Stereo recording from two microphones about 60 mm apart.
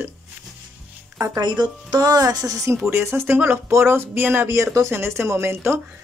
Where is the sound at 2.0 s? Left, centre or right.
Right.